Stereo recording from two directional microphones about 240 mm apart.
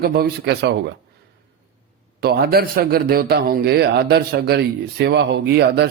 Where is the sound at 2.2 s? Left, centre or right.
Right.